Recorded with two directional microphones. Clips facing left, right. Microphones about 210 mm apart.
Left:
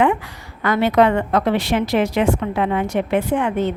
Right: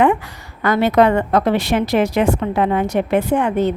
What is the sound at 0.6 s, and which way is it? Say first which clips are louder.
A woman's voice: right 2 dB; 40° right (ahead or behind).